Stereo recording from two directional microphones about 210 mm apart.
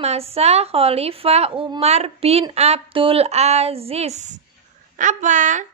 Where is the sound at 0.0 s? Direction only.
30° right (ahead or behind).